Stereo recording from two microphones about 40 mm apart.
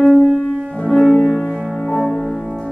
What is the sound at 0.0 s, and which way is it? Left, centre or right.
Music, centre.